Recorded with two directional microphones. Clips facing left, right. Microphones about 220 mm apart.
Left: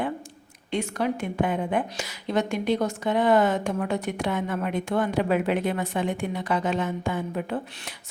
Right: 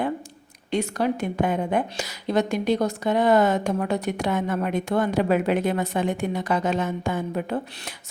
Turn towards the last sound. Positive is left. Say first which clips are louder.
# right 2 dB
turn(degrees=-45)  # may be behind; listen again after turning